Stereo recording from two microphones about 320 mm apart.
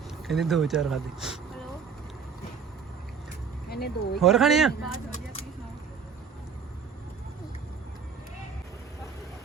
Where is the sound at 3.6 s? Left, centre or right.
Left.